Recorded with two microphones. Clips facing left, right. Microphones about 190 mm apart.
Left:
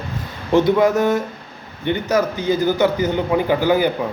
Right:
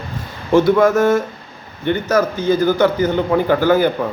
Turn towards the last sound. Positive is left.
turn(degrees=15)  # may be behind; listen again after turning